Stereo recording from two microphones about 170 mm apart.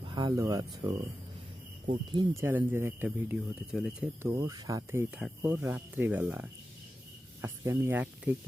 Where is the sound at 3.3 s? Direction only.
Centre (ahead or behind).